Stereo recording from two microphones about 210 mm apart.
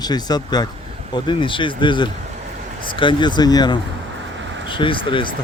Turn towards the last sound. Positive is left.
turn(degrees=25)  # may be behind; listen again after turning